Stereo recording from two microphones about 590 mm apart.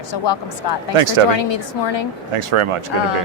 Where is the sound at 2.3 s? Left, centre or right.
Right.